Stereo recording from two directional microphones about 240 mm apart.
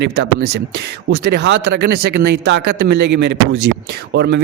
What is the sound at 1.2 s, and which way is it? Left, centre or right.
Speech, right.